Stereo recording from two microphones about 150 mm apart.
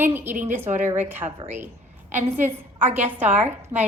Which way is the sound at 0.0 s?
15° right (ahead or behind).